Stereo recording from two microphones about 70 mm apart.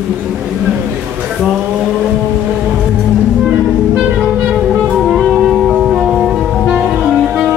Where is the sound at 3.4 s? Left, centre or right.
Centre.